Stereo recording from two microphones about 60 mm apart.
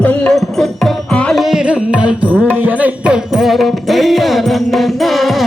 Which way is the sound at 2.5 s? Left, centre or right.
Right.